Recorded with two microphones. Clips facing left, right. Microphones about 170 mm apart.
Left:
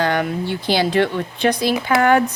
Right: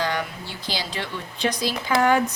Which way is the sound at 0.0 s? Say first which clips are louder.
Left 7 dB; 60° left (ahead or behind).